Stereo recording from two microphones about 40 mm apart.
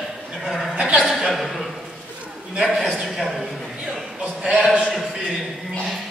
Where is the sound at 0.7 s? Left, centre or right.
Centre.